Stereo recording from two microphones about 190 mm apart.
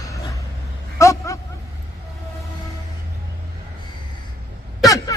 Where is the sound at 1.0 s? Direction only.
15° left (ahead or behind).